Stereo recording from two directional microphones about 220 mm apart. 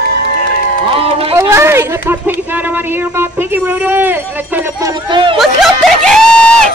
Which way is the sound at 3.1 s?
10° right (ahead or behind).